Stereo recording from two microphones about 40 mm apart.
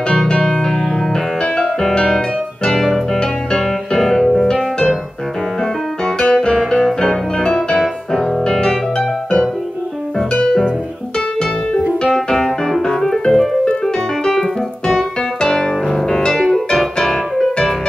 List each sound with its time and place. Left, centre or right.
0.4 s music: centre
3.2 s music: centre
6.0 s music: left
12.0 s music: centre
13.3 s piano: centre
14.2 s keyboard: centre
15.4 s music: centre
16.5 s piano: centre